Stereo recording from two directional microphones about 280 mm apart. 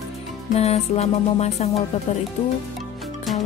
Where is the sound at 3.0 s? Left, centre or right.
Centre.